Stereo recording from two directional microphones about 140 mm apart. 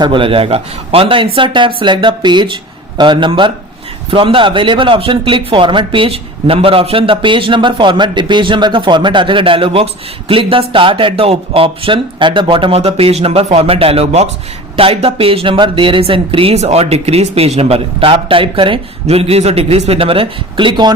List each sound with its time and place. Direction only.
0.0 s speech: 35° right (ahead or behind)